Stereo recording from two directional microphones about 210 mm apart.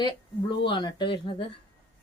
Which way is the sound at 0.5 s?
25° left (ahead or behind).